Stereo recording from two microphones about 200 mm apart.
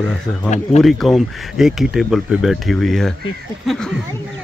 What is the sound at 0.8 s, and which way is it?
Speech, centre (ahead or behind).